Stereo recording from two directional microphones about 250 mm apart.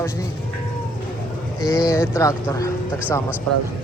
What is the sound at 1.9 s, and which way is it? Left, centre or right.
Speech, centre.